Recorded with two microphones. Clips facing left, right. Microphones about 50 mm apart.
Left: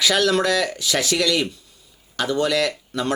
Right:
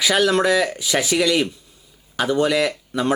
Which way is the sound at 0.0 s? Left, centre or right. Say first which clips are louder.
Right 1 dB; centre.